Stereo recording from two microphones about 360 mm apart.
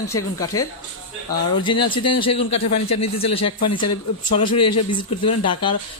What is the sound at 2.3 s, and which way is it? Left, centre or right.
A man's voice, left.